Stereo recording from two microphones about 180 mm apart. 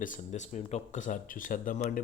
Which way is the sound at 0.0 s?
45° left (ahead or behind).